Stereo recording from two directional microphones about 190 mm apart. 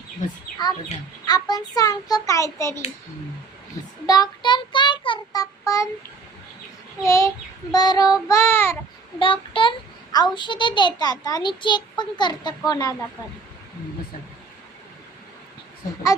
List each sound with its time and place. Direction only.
1.3 s a child's voice: 20° left (ahead or behind)
4.0 s child singing: 20° left (ahead or behind)
7.0 s a child's voice: 15° left (ahead or behind)
9.1 s child singing: 25° left (ahead or behind)
10.3 s a child's voice: 25° left (ahead or behind)